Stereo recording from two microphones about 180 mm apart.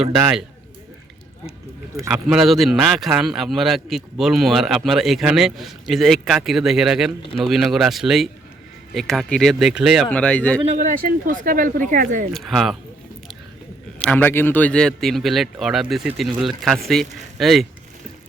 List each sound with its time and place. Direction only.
0.2 s a man's voice: 5° right (ahead or behind)
2.3 s a man's voice: centre (ahead or behind)
10.9 s speech: 50° right (ahead or behind)
12.3 s a man's voice: centre (ahead or behind)
14.0 s a man's voice: 5° left (ahead or behind)